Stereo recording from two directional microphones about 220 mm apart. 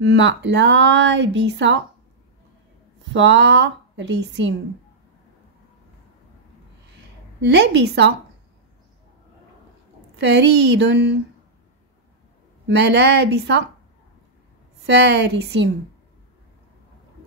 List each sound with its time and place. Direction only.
0.0 s speech: 55° right (ahead or behind)
3.1 s a woman's voice: 55° right (ahead or behind)
7.4 s speech: 50° right (ahead or behind)
10.2 s speech: 50° right (ahead or behind)
12.6 s speech: 50° right (ahead or behind)
14.9 s speech: 50° right (ahead or behind)